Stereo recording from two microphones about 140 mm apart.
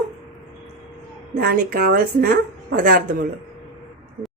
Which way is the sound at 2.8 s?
70° right (ahead or behind).